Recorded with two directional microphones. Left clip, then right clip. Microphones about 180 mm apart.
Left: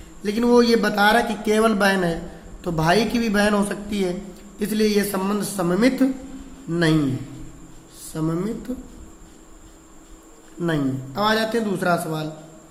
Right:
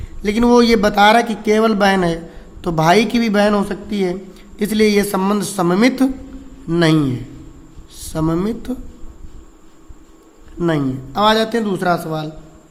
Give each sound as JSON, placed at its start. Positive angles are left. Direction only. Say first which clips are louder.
{"t": 0.2, "sound": "speech", "louder": "right 4 dB", "side_deg": -35}
{"t": 4.6, "sound": "speech", "louder": "right 6 dB", "side_deg": -35}
{"t": 8.1, "sound": "speech", "louder": "right 6 dB", "side_deg": -45}
{"t": 10.6, "sound": "speech", "louder": "right 5 dB", "side_deg": -35}